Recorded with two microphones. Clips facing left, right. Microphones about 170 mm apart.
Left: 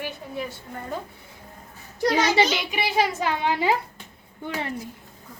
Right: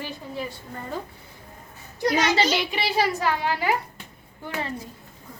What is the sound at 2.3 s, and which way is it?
A woman's voice, 15° left (ahead or behind).